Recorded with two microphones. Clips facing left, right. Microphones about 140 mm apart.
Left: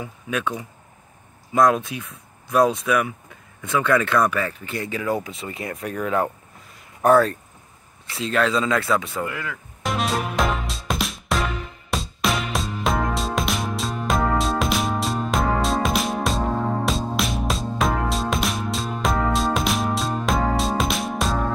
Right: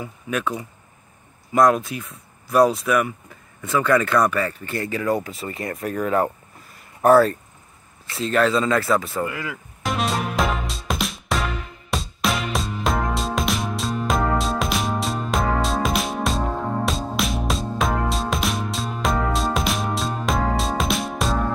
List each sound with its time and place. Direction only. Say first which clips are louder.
1.5 s speech: right 1 dB; centre (ahead or behind)
8.1 s music: right 2 dB; centre (ahead or behind)